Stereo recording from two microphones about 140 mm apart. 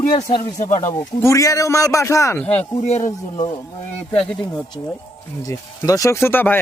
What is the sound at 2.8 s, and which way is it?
Speech, 55° left (ahead or behind).